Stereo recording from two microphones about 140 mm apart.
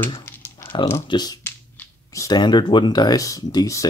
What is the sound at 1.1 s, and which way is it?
Speech, 30° left (ahead or behind).